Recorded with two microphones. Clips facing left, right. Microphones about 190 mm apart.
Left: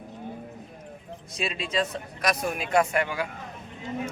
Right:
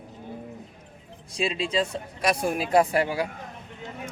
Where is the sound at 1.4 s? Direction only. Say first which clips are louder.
Right 3 dB; 30° right (ahead or behind).